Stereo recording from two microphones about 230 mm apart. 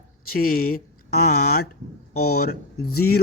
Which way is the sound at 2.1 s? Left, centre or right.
Left.